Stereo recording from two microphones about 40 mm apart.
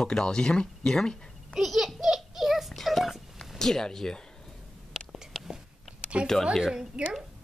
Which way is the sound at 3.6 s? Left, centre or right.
Centre.